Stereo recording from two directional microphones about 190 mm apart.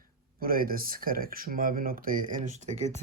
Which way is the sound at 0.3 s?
50° right (ahead or behind).